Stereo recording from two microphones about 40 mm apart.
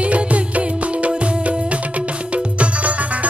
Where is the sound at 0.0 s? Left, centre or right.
Right.